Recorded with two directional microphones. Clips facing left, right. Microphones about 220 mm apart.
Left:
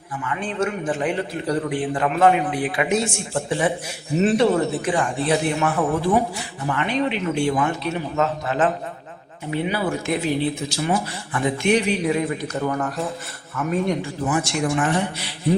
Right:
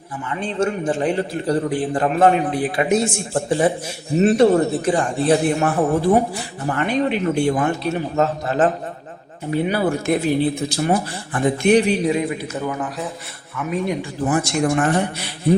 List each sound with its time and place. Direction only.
0.6 s a man's voice: 30° right (ahead or behind); by 11.8 s 45° right (ahead or behind)
12.0 s a man's voice: 20° right (ahead or behind)
12.4 s a man's voice: 5° right (ahead or behind)
14.3 s speech: 45° right (ahead or behind)